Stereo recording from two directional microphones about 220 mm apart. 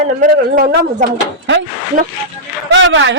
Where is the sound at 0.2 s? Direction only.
35° right (ahead or behind).